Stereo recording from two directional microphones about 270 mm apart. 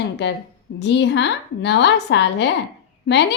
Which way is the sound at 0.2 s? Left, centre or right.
Left.